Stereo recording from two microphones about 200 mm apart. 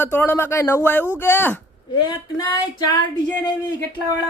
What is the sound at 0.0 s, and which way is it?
Speech, 10° left (ahead or behind).